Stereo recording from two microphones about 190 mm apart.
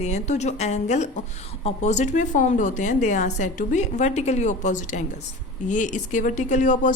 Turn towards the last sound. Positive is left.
turn(degrees=45)  # may be behind; listen again after turning